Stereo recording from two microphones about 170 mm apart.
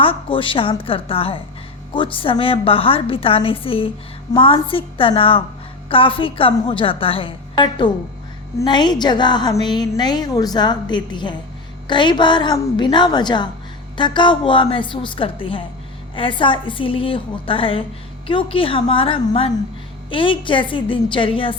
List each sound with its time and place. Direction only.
0.0 s a woman's voice: 30° left (ahead or behind)